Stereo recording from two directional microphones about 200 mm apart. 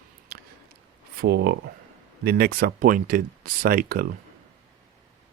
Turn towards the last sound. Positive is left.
turn(degrees=-45)  # may be behind; listen again after turning